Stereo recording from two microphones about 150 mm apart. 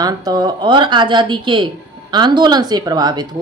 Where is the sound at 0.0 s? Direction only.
25° right (ahead or behind).